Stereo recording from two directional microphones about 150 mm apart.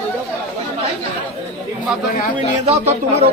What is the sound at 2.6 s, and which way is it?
Speech, 45° right (ahead or behind).